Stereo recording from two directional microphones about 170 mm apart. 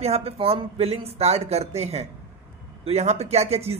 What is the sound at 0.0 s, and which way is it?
A man's voice, 35° right (ahead or behind).